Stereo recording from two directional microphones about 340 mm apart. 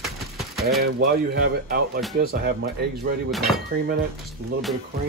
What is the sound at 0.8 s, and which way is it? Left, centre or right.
Speech, right.